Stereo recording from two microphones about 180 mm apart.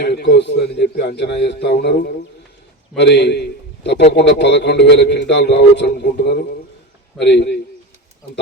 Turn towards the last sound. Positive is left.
turn(degrees=65)  # may be behind; listen again after turning